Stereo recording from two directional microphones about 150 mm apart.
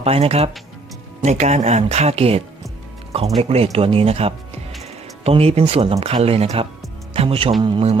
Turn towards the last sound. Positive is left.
turn(degrees=-35)  # may be behind; listen again after turning